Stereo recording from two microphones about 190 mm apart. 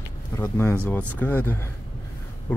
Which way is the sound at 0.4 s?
10° left (ahead or behind).